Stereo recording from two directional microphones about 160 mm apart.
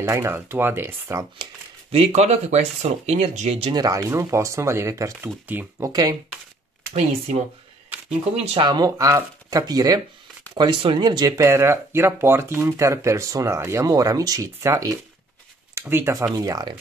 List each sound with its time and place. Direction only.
0.0 s speech: 15° right (ahead or behind)
1.4 s speech: 40° right (ahead or behind)
3.7 s speech: 25° right (ahead or behind)
5.9 s speech: 25° right (ahead or behind)
6.9 s speech: 40° right (ahead or behind)
8.5 s speech: 25° right (ahead or behind)